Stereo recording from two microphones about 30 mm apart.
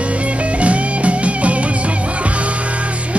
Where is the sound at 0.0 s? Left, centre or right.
Right.